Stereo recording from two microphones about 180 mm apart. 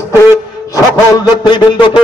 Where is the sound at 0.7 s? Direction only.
20° left (ahead or behind).